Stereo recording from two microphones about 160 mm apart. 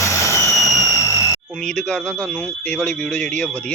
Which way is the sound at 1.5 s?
5° left (ahead or behind).